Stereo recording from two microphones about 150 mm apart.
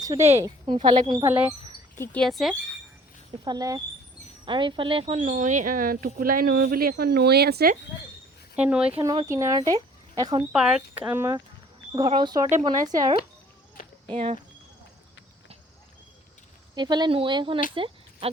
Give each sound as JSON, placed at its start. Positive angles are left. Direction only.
{"t": 0.0, "sound": "speech", "side_deg": -20}
{"t": 2.0, "sound": "speech", "side_deg": 5}
{"t": 3.4, "sound": "speech", "side_deg": -25}
{"t": 8.5, "sound": "speech", "side_deg": -10}
{"t": 9.0, "sound": "speech", "side_deg": -25}
{"t": 10.5, "sound": "speech", "side_deg": -5}
{"t": 11.9, "sound": "speech", "side_deg": -30}
{"t": 14.1, "sound": "speech", "side_deg": -40}
{"t": 16.7, "sound": "speech", "side_deg": -30}
{"t": 17.7, "sound": "a sound", "side_deg": -35}